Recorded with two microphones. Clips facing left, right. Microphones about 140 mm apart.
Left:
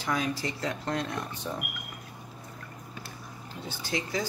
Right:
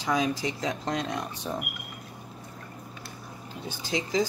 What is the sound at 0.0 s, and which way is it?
Speech, 15° right (ahead or behind).